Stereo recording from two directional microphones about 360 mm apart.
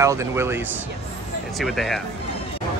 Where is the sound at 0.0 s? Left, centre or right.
Centre.